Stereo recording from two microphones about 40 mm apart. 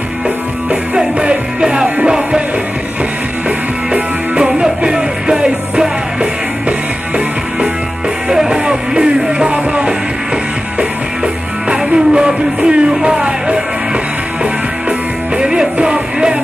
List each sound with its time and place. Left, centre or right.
0.7 s music: right
4.5 s music: right
8.3 s music: centre
11.7 s music: right